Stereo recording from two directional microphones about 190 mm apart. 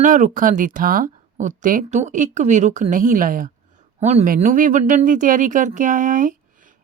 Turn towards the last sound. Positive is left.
turn(degrees=-45)  # may be behind; listen again after turning